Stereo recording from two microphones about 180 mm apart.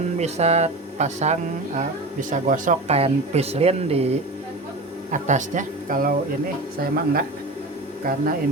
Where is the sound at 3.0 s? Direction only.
35° right (ahead or behind); by 7.2 s 55° right (ahead or behind).